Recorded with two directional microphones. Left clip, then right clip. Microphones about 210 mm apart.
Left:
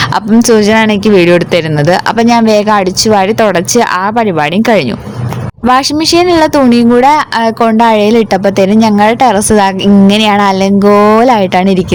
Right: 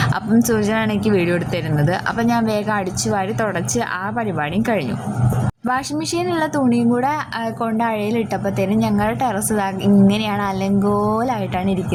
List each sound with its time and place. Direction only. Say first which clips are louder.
0.3 s a woman's voice: left 12 dB; 35° left (ahead or behind)